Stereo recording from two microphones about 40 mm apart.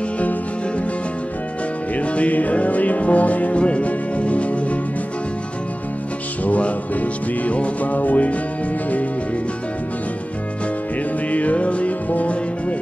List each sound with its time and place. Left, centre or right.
2.0 s music: left
6.4 s music: left
11.3 s music: left